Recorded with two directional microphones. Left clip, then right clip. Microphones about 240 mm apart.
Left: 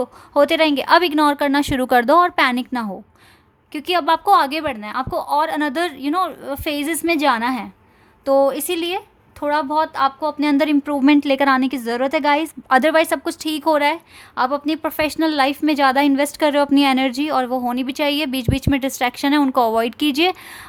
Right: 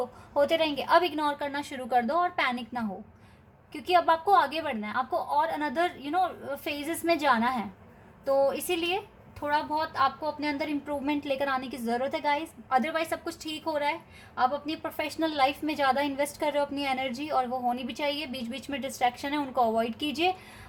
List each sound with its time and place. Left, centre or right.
0.3 s a woman's voice: left